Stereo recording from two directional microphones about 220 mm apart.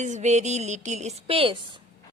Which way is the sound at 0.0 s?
30° right (ahead or behind).